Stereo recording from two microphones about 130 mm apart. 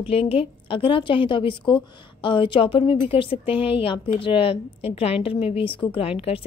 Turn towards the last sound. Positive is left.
turn(degrees=45)  # may be behind; listen again after turning